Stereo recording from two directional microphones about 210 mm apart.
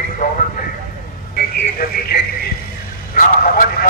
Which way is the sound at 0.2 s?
40° left (ahead or behind).